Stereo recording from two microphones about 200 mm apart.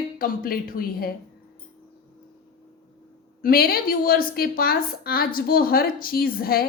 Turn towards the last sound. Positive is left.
turn(degrees=50)  # may be behind; listen again after turning